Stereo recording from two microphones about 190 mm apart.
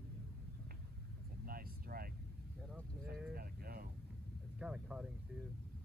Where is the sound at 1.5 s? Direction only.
50° right (ahead or behind).